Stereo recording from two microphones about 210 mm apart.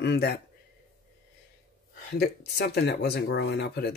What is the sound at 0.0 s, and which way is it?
Speech, 50° left (ahead or behind).